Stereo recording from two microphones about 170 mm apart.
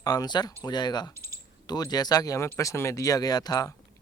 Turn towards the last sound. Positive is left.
turn(degrees=25)  # may be behind; listen again after turning